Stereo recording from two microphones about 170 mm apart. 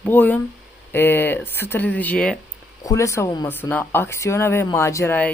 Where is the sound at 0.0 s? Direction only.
10° left (ahead or behind).